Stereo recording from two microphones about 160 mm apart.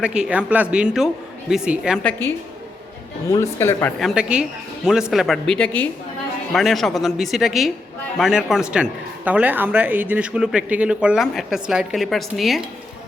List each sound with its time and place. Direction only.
0.0 s speech: 5° right (ahead or behind)
2.0 s speech: 15° left (ahead or behind)
4.0 s speech: 5° right (ahead or behind)